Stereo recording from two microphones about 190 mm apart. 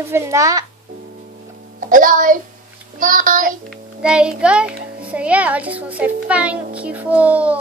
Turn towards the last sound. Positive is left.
turn(degrees=-5)  # may be behind; listen again after turning